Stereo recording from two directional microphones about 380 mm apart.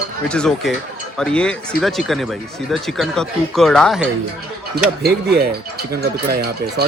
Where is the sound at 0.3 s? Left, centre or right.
Centre.